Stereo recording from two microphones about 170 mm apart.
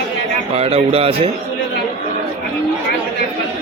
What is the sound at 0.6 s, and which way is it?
Speech, 35° right (ahead or behind).